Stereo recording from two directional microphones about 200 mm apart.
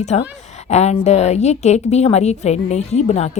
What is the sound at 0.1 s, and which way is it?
A woman's voice, 30° left (ahead or behind).